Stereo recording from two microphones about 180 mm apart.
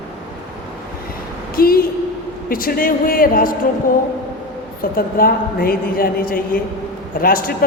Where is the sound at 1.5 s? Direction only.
55° left (ahead or behind).